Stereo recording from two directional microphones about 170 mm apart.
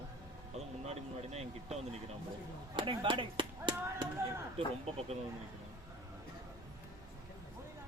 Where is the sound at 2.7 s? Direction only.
30° right (ahead or behind).